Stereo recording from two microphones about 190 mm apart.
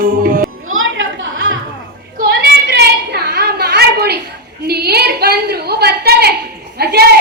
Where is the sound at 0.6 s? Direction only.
90° right.